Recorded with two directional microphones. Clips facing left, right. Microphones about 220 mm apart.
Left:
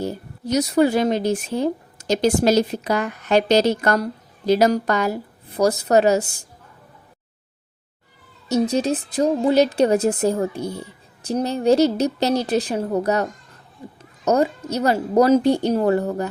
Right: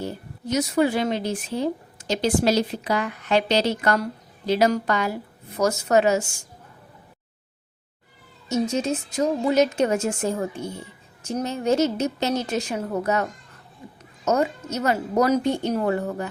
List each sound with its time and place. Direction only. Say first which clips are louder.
0.0 s a woman's voice: left 4 dB; 40° left (ahead or behind)
8.4 s a woman's voice: left 4 dB; 35° left (ahead or behind)